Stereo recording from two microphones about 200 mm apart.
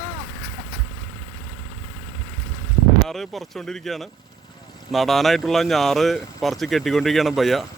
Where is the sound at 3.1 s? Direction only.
Centre (ahead or behind).